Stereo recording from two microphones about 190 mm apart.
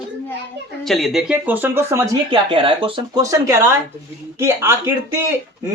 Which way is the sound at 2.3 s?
25° right (ahead or behind).